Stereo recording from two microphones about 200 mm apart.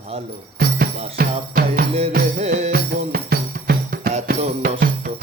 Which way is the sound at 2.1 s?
35° right (ahead or behind).